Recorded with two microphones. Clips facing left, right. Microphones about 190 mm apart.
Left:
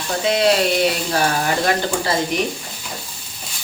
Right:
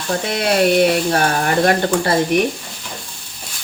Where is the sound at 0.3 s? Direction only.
55° right (ahead or behind).